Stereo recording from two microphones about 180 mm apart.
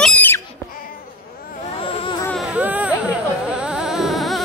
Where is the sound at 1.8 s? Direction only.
30° left (ahead or behind).